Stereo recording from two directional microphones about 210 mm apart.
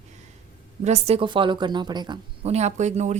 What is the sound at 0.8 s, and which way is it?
A woman's voice, 30° right (ahead or behind).